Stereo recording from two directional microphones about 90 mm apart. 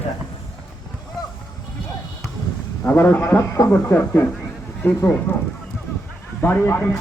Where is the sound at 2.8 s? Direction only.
25° left (ahead or behind).